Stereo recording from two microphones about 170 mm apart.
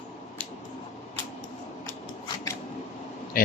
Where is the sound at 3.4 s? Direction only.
55° left (ahead or behind).